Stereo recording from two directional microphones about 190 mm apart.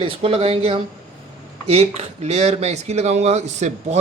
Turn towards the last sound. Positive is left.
turn(degrees=-35)  # may be behind; listen again after turning